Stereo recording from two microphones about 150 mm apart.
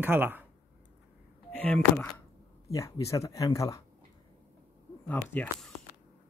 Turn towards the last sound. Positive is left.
turn(degrees=5)  # may be behind; listen again after turning